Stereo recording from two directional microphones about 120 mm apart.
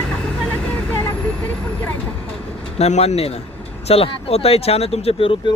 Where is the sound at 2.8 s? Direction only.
65° left (ahead or behind).